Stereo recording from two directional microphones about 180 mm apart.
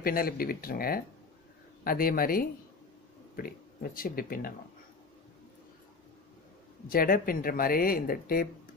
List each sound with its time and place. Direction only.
0.0 s speech: 55° left (ahead or behind)
6.9 s speech: 55° left (ahead or behind)